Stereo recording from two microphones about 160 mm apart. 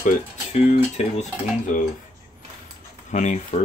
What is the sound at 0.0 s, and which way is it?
Speech, 45° left (ahead or behind).